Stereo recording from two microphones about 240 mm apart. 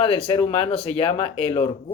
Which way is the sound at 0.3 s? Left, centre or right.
Left.